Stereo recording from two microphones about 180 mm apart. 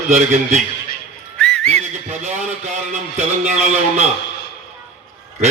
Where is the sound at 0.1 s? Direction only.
40° right (ahead or behind).